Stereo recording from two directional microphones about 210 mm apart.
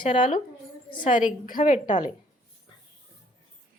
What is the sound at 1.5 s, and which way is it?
Speech, 40° left (ahead or behind).